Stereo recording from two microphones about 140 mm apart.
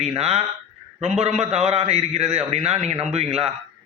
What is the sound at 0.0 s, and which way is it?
A man's voice, 50° right (ahead or behind).